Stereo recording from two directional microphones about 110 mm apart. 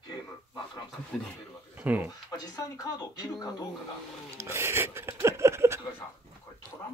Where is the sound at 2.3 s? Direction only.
35° left (ahead or behind).